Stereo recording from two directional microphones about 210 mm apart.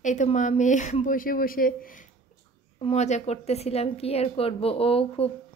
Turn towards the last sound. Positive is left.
turn(degrees=25)  # may be behind; listen again after turning